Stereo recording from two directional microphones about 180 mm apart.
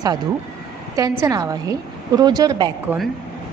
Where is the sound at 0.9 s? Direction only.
20° right (ahead or behind).